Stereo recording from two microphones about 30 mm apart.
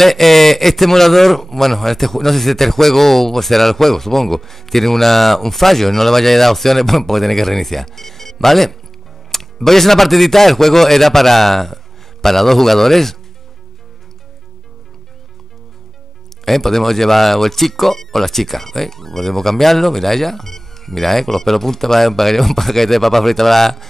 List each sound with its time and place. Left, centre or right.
0.0 s a man's voice: centre
9.3 s music: centre
10.0 s a man's voice: centre
16.4 s a man's voice: centre